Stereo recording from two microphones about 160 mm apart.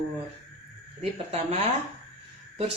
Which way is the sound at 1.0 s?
45° right (ahead or behind).